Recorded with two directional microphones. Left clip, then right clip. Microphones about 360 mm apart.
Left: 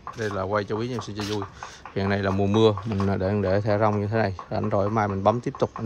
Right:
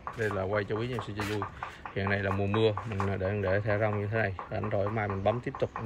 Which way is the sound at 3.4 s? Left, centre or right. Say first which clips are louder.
Left 4 dB; centre.